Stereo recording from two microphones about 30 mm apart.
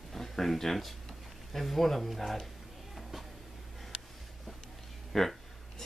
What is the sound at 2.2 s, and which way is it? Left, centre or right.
Speech, centre.